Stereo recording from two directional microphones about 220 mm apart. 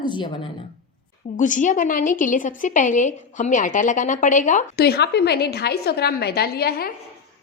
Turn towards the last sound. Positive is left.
turn(degrees=45)  # may be behind; listen again after turning